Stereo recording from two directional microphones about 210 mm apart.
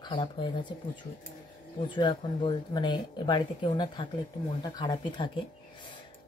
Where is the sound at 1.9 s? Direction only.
20° left (ahead or behind).